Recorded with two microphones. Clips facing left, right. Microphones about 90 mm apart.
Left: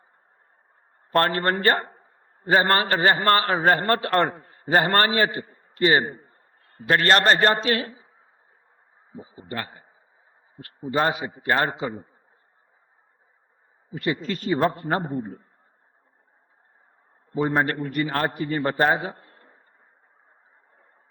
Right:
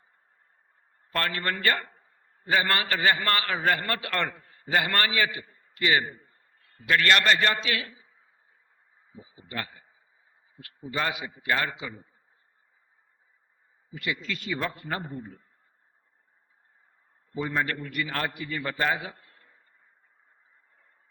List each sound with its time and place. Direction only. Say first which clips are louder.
1.1 s a man's voice: left 8 dB; 40° left (ahead or behind)
13.9 s a man's voice: left 6 dB; 40° left (ahead or behind)
17.3 s a man's voice: left 6 dB; 40° left (ahead or behind)